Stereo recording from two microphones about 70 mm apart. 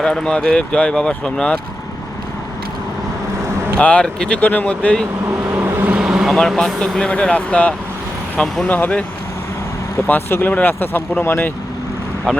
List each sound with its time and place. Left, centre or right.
0.0 s speech: centre
3.8 s speech: centre
5.4 s vehicle: right
6.0 s vehicle: centre
6.6 s speech: centre
10.1 s speech: left